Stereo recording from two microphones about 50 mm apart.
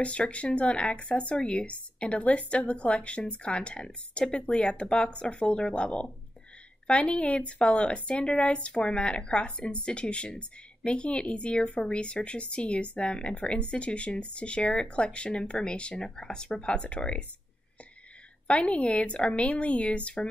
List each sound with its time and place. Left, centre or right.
0.0 s speech: left
18.5 s speech: left